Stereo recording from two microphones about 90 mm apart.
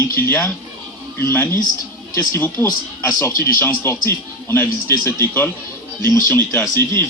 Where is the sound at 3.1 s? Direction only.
35° left (ahead or behind).